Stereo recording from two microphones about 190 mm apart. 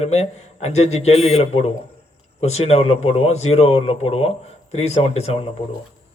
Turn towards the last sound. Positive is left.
turn(degrees=30)  # may be behind; listen again after turning